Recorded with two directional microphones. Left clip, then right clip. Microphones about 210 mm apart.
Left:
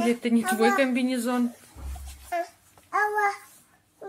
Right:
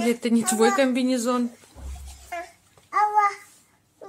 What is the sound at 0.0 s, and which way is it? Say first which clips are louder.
Speech: right 1 dB; 25° right (ahead or behind).